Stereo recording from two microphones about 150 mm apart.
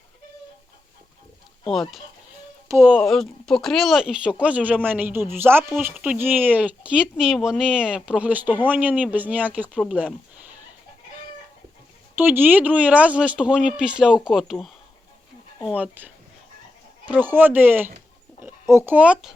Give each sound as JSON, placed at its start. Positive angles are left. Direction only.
{"t": 1.6, "sound": "speech", "side_deg": 0}
{"t": 2.6, "sound": "speech", "side_deg": -15}
{"t": 2.9, "sound": "speech", "side_deg": 0}
{"t": 12.1, "sound": "speech", "side_deg": -15}